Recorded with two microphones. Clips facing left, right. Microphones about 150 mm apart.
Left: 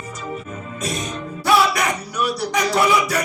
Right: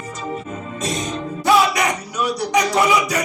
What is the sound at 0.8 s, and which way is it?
Music, 25° right (ahead or behind).